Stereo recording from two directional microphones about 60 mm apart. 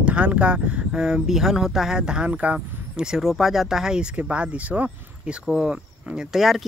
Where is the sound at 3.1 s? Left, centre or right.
Centre.